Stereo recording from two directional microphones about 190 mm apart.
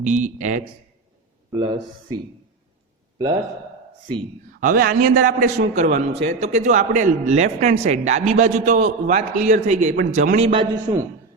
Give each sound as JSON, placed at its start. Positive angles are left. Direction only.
{"t": 0.0, "sound": "a man's voice", "side_deg": -40}
{"t": 1.5, "sound": "speech", "side_deg": -25}
{"t": 4.6, "sound": "a man's voice", "side_deg": -45}